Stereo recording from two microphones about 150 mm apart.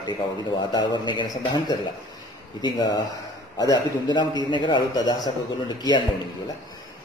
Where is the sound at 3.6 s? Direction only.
25° left (ahead or behind).